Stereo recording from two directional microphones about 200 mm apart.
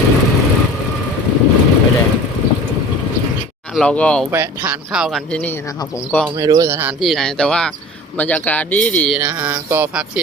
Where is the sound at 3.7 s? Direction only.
5° left (ahead or behind).